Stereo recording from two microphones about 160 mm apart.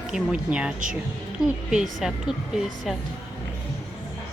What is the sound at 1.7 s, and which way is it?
A woman's voice, 5° right (ahead or behind).